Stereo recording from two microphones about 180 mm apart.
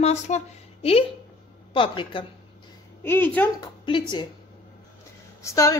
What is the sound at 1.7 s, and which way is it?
Speech, 30° left (ahead or behind).